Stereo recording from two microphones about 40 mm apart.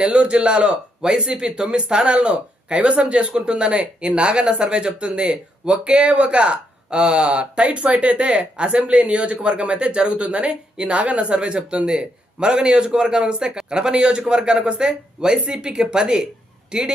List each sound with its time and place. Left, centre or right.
0.0 s speech: right